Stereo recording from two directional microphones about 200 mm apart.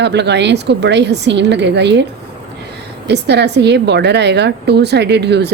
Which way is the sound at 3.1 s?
55° right (ahead or behind).